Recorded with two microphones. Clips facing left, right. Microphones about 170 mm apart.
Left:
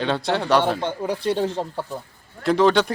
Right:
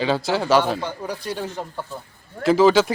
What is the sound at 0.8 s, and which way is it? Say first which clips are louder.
Speech: left 4 dB; 25° left (ahead or behind).